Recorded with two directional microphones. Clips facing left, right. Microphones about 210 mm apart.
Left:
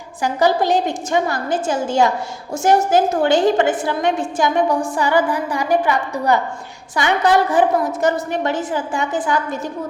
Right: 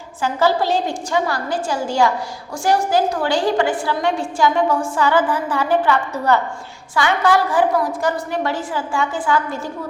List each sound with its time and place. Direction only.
0.2 s a woman's voice: 15° left (ahead or behind)